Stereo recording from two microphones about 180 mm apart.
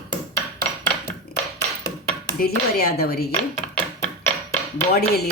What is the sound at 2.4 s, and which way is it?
Speech, 60° left (ahead or behind).